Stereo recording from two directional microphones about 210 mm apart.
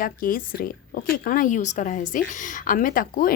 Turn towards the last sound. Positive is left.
turn(degrees=40)  # may be behind; listen again after turning